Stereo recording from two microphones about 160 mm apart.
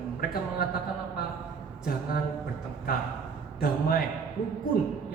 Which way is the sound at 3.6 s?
65° left (ahead or behind).